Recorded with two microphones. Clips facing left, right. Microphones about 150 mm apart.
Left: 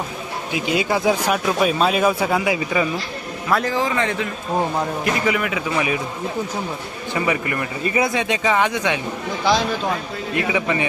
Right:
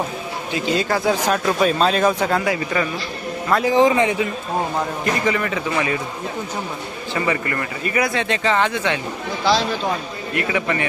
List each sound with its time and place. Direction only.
0.5 s speech: 10° left (ahead or behind)
3.7 s a man's voice: 20° right (ahead or behind)
5.0 s a man's voice: 5° left (ahead or behind)
7.1 s speech: 15° left (ahead or behind)